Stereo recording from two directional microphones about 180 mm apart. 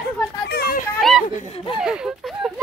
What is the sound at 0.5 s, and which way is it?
Children playing, 60° left (ahead or behind).